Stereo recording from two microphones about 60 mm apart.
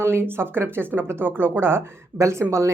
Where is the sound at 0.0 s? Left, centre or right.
Right.